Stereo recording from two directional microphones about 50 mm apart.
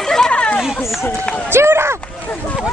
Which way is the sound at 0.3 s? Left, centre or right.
Left.